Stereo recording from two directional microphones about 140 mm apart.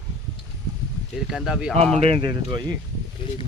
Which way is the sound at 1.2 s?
5° right (ahead or behind).